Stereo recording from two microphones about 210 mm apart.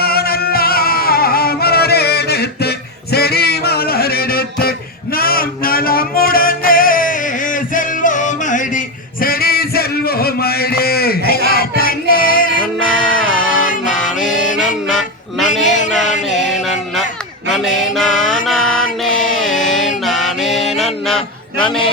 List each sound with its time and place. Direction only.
0.0 s music: 45° left (ahead or behind)
9.2 s a sound: 45° left (ahead or behind)
11.8 s music: 45° left (ahead or behind)
14.6 s music: centre (ahead or behind)
17.5 s mantra: centre (ahead or behind)
18.4 s music: centre (ahead or behind)